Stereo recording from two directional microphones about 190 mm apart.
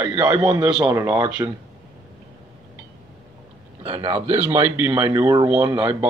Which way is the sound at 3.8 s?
30° right (ahead or behind).